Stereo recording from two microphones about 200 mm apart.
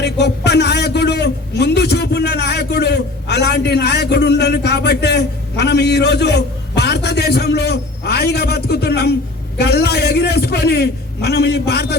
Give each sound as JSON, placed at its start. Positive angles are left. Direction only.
{"t": 0.0, "sound": "a man's voice", "side_deg": 55}